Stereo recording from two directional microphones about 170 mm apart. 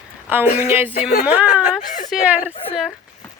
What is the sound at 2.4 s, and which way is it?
Speech, 35° left (ahead or behind).